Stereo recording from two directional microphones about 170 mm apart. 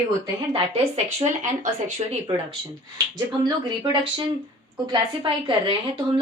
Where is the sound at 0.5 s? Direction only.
40° right (ahead or behind).